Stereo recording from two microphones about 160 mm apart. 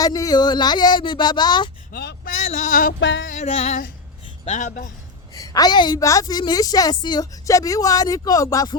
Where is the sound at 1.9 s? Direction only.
80° left.